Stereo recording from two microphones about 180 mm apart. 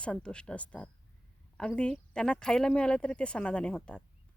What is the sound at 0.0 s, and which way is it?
A woman's voice, 5° left (ahead or behind).